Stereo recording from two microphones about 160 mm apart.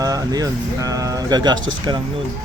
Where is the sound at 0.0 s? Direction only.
20° right (ahead or behind).